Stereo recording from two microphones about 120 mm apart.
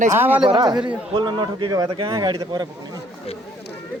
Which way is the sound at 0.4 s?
35° right (ahead or behind).